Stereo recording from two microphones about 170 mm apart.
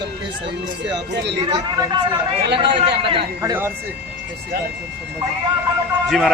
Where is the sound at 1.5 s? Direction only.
25° right (ahead or behind).